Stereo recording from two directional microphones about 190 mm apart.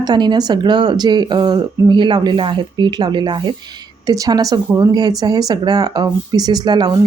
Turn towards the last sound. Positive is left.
turn(degrees=-20)  # may be behind; listen again after turning